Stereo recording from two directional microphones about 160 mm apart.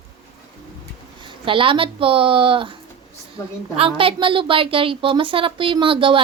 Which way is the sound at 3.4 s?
20° left (ahead or behind).